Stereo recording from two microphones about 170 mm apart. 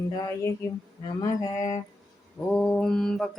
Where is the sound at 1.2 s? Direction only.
20° left (ahead or behind).